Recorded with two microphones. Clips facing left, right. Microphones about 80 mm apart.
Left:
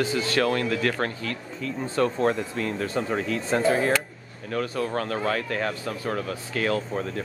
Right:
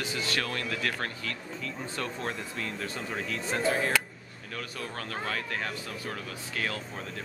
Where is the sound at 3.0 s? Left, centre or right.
Left.